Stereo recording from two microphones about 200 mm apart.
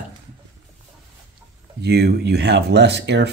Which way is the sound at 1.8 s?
55° right (ahead or behind).